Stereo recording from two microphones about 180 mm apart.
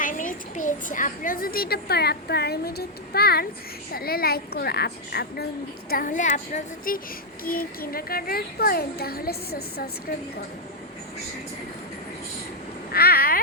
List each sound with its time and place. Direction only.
0.0 s a child's voice: 50° left (ahead or behind)
5.9 s a woman's voice: 50° left (ahead or behind)
12.9 s a sound: 60° left (ahead or behind)